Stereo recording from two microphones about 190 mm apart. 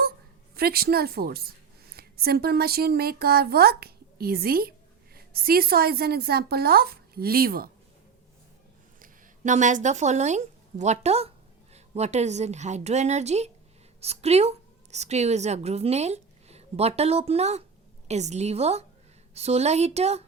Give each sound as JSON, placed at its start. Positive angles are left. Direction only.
{"t": 0.5, "sound": "a woman's voice", "side_deg": -55}
{"t": 9.0, "sound": "a woman's voice", "side_deg": -40}